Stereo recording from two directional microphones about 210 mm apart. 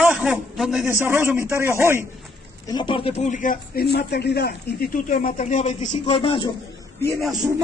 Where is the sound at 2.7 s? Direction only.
20° left (ahead or behind).